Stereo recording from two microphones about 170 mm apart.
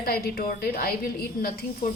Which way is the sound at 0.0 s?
60° left (ahead or behind).